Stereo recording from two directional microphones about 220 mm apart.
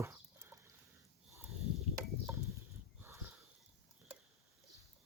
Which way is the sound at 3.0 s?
10° right (ahead or behind).